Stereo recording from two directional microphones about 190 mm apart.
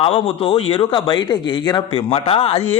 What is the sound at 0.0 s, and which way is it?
A man's voice, 30° left (ahead or behind).